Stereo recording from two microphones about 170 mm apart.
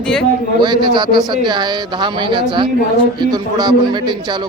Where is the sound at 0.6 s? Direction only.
25° right (ahead or behind).